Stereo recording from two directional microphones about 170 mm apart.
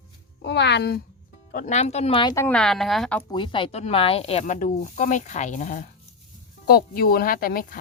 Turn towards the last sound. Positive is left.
turn(degrees=60)  # may be behind; listen again after turning